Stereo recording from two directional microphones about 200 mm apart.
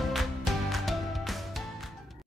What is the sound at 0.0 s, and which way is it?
Music, centre (ahead or behind).